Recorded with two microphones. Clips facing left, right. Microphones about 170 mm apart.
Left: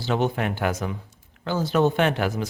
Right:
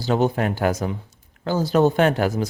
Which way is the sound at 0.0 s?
40° right (ahead or behind).